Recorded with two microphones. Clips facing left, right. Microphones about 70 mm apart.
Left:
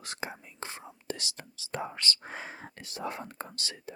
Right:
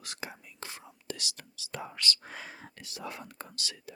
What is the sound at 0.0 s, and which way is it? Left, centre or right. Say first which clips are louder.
Speech: left 4 dB; left.